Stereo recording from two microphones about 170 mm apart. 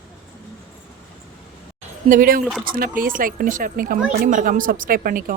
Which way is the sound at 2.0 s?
55° right (ahead or behind).